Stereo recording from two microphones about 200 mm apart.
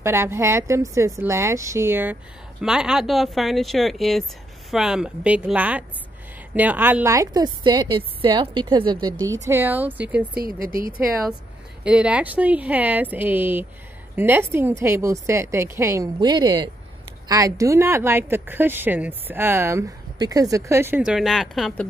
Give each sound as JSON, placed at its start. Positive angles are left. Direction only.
{"t": 0.0, "sound": "a woman's voice", "side_deg": -10}
{"t": 9.5, "sound": "speech", "side_deg": -10}
{"t": 10.3, "sound": "speech", "side_deg": -45}
{"t": 11.8, "sound": "speech", "side_deg": -5}